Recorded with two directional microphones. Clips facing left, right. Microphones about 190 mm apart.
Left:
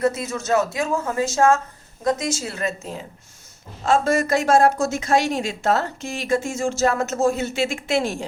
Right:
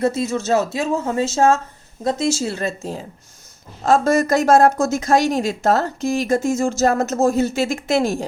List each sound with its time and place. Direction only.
0.0 s speech: 30° right (ahead or behind)